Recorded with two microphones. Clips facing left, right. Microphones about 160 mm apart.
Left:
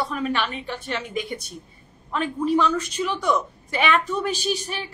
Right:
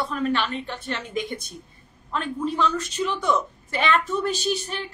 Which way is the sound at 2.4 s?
10° left (ahead or behind).